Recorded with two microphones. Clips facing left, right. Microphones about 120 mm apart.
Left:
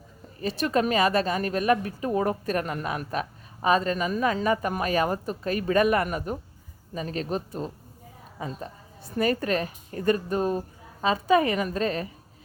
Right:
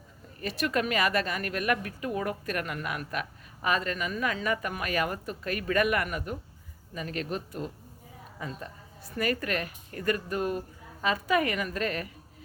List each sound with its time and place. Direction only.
0.4 s a woman's voice: 30° left (ahead or behind)